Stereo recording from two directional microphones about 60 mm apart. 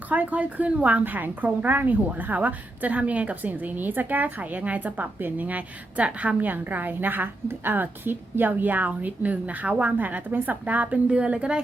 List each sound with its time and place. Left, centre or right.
0.1 s a woman's voice: right